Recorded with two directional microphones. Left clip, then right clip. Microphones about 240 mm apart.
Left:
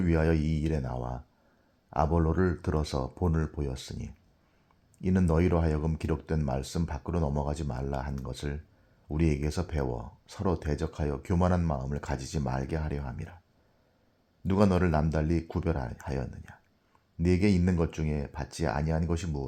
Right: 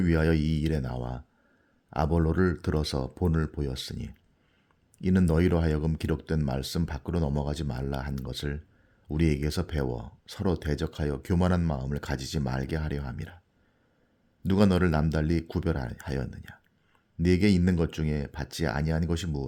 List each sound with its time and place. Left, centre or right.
0.0 s speech: right
14.4 s speech: right